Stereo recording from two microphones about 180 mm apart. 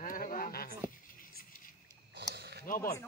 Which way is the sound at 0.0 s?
50° left (ahead or behind).